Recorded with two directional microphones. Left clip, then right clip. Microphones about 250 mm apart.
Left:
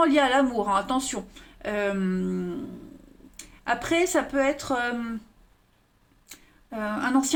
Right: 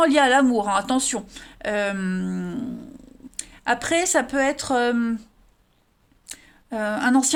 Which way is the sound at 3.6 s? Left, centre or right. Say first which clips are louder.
Right 3 dB; right.